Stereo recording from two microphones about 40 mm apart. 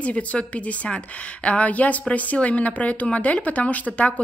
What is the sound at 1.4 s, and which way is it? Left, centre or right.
Speech, left.